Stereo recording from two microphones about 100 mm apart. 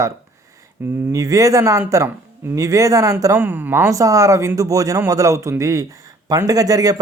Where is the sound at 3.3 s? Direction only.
20° right (ahead or behind).